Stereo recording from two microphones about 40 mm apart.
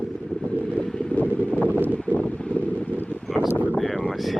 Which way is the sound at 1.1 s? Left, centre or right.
Left.